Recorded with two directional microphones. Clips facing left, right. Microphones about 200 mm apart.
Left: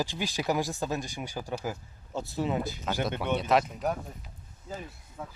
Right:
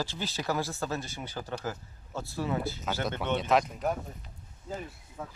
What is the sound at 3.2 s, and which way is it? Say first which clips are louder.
Speech: even; 5° left (ahead or behind).